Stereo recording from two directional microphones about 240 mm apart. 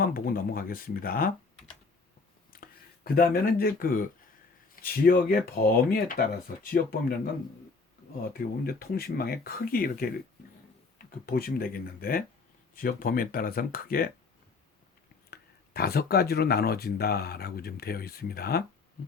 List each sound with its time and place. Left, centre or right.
0.0 s speech: left
2.5 s speech: left
8.3 s speech: left
15.3 s speech: left